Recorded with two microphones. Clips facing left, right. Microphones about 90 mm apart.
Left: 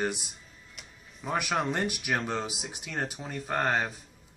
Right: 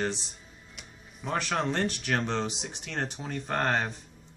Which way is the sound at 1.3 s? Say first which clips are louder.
Even; 10° left (ahead or behind).